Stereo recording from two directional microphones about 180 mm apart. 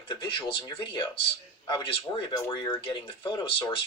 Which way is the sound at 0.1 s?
25° left (ahead or behind).